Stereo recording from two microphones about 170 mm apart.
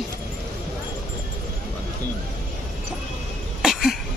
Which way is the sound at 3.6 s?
Centre (ahead or behind).